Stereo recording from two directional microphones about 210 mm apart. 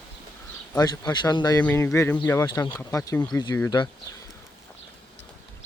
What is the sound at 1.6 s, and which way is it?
Speech, 10° left (ahead or behind).